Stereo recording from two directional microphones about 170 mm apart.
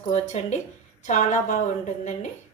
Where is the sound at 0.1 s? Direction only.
40° left (ahead or behind).